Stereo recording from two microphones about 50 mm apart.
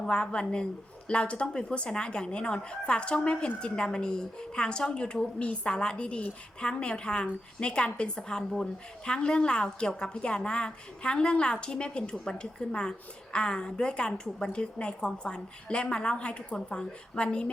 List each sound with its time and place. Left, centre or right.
0.0 s a woman's voice: left